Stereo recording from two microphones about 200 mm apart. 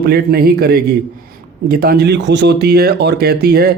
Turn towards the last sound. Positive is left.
turn(degrees=-50)  # may be behind; listen again after turning